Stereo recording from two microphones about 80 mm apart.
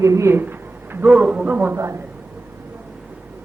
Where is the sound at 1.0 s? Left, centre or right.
Centre.